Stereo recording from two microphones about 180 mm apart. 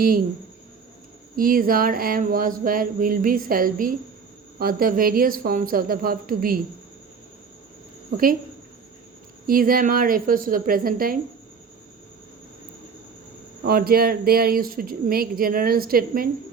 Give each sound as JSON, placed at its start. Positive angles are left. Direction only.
{"t": 1.4, "sound": "speech", "side_deg": -50}
{"t": 8.1, "sound": "speech", "side_deg": -50}
{"t": 9.5, "sound": "speech", "side_deg": -55}
{"t": 13.6, "sound": "speech", "side_deg": -55}